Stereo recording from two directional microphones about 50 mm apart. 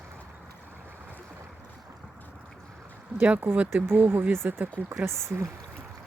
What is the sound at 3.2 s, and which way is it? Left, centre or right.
Speech, right.